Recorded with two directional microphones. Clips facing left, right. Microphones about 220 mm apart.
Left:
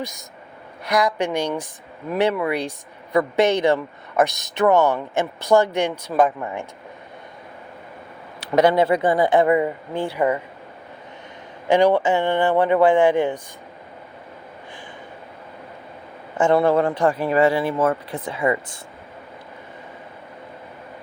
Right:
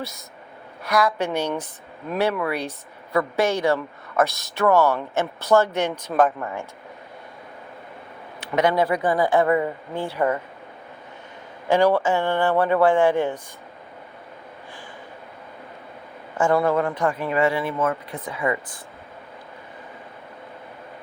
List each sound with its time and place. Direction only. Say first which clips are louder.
0.9 s speech: left 1 dB; 15° left (ahead or behind)
8.4 s a sound: left 4 dB; 40° left (ahead or behind)
8.7 s speech: left 3 dB; 25° left (ahead or behind)
11.7 s speech: left 2 dB; 15° left (ahead or behind)
16.4 s speech: left 3 dB; 25° left (ahead or behind)